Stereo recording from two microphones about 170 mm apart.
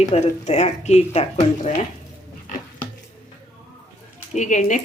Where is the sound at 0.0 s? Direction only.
40° left (ahead or behind).